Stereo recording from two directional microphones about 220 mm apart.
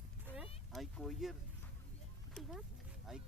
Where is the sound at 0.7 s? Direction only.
Centre (ahead or behind).